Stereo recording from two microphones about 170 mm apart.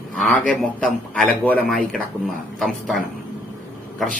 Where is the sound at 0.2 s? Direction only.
5° left (ahead or behind).